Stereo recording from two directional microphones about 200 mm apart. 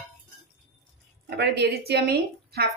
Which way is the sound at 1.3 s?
55° right (ahead or behind).